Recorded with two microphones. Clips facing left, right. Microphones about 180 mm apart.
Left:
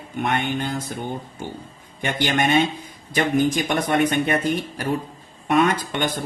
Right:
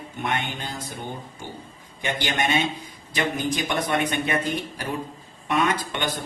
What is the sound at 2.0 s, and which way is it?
Speech, 55° left (ahead or behind).